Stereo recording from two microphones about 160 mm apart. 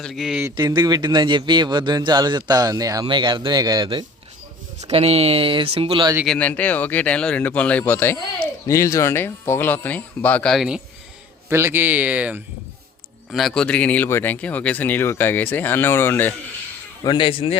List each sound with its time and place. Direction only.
0.0 s speech: centre (ahead or behind)
0.5 s a man's voice: 30° right (ahead or behind)
4.8 s speech: 40° right (ahead or behind)
6.2 s speech: 5° left (ahead or behind)
11.4 s speech: 15° right (ahead or behind)
13.3 s speech: 5° left (ahead or behind)
17.0 s speech: 30° left (ahead or behind)